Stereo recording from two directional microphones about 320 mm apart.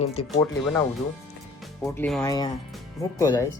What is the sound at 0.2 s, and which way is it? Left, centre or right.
Speech, left.